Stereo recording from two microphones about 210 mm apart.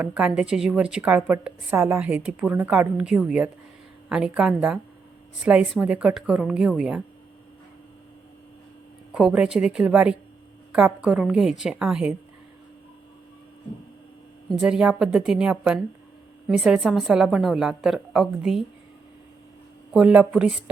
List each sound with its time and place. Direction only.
0.0 s a woman's voice: 5° right (ahead or behind)
9.1 s a woman's voice: 5° right (ahead or behind)
14.6 s a woman's voice: 5° right (ahead or behind)
19.9 s a woman's voice: 5° right (ahead or behind)